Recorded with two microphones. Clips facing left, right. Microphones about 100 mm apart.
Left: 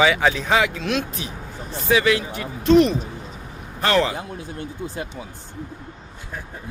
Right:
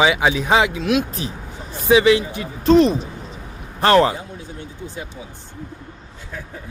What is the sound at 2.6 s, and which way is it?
Speech, 35° right (ahead or behind).